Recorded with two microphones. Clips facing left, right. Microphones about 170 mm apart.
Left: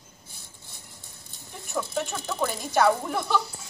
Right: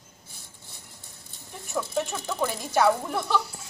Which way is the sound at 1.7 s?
Centre (ahead or behind).